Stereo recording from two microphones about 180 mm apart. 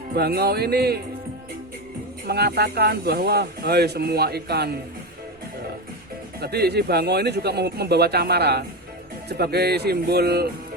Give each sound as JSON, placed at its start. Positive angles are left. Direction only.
{"t": 0.2, "sound": "speech", "side_deg": -60}
{"t": 2.2, "sound": "speech", "side_deg": -65}
{"t": 6.4, "sound": "speech", "side_deg": -60}